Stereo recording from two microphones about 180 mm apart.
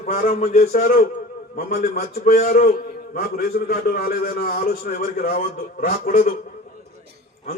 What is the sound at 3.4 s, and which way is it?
A man's voice, 60° left (ahead or behind).